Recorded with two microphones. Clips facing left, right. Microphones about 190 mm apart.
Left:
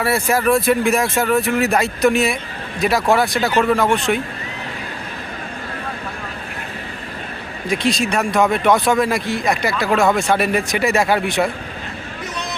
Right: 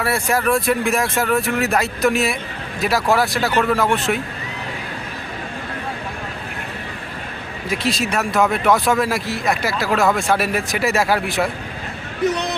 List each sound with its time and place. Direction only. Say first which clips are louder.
0.0 s speech: left 2 dB; centre (ahead or behind)
7.7 s speech: left 3 dB; 5° right (ahead or behind)
12.2 s a sound: right 10 dB; 65° right (ahead or behind)